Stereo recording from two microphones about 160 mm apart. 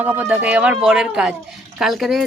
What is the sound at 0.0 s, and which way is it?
Speech, 10° right (ahead or behind).